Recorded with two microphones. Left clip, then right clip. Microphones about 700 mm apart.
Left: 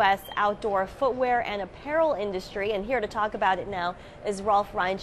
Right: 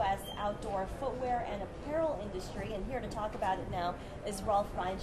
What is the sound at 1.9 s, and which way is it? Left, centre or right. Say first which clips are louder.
A woman's voice: left 10 dB; left.